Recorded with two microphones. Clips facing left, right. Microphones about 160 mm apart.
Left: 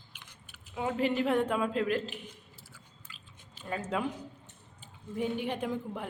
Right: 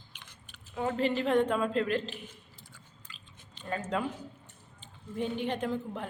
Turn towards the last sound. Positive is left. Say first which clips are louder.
# right 1 dB
turn(degrees=10)  # may be behind; listen again after turning